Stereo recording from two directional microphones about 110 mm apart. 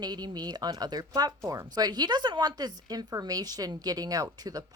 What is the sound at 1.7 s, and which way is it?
Speech, 40° right (ahead or behind).